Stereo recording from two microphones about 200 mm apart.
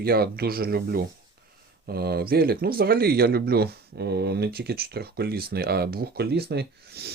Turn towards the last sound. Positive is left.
turn(degrees=-55)  # may be behind; listen again after turning